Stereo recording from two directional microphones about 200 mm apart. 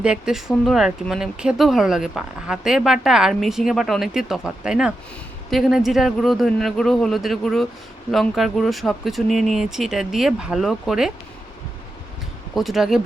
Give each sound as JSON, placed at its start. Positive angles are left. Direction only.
{"t": 0.0, "sound": "speech", "side_deg": -5}
{"t": 12.5, "sound": "speech", "side_deg": 0}